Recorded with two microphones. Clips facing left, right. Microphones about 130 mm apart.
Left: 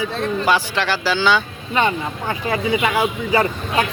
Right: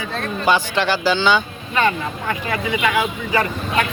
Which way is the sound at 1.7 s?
25° left (ahead or behind).